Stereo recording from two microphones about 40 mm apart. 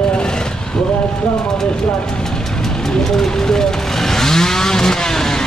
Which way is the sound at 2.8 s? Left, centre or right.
Centre.